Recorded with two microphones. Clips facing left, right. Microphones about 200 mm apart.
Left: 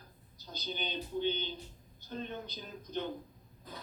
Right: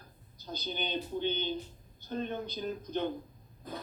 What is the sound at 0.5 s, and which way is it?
A man's voice, 55° right (ahead or behind).